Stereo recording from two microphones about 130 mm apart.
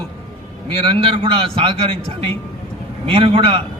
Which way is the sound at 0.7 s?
45° right (ahead or behind).